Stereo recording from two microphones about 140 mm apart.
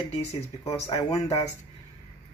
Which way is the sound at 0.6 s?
20° left (ahead or behind).